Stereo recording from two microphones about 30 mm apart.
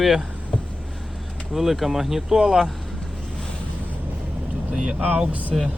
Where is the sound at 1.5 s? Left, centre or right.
Centre.